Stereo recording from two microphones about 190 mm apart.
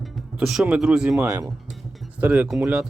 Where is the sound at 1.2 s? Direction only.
15° right (ahead or behind).